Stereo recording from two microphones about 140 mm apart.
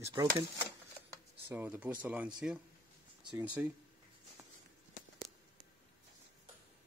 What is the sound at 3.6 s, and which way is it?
Speech, 10° right (ahead or behind).